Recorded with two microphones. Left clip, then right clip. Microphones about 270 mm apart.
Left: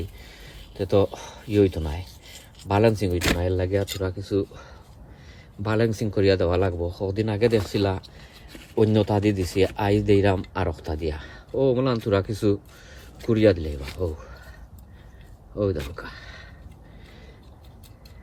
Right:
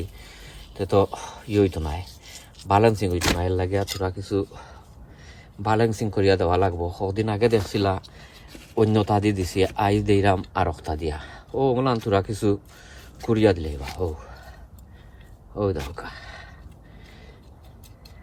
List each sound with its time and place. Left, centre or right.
0.2 s speech: centre
6.7 s speech: right
7.1 s speech: centre
15.5 s speech: centre